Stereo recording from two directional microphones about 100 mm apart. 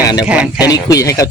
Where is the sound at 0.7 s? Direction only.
35° left (ahead or behind).